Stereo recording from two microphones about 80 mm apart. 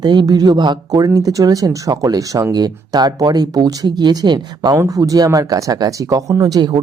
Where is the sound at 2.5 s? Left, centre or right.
Right.